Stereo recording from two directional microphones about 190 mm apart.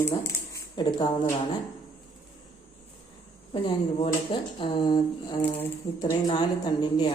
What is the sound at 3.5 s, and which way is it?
Speech, 25° left (ahead or behind).